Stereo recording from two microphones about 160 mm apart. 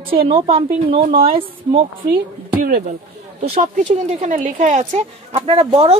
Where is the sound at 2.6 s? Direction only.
50° right (ahead or behind).